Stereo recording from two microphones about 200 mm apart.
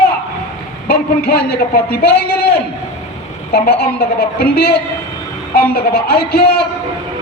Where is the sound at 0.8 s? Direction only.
50° left (ahead or behind).